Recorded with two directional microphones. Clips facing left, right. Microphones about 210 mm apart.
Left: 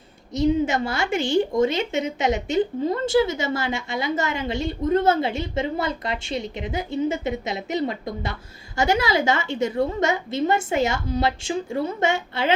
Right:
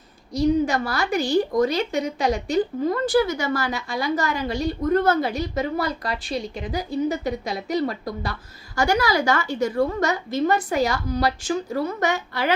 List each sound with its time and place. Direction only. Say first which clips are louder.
0.3 s a woman's voice: even; 25° left (ahead or behind)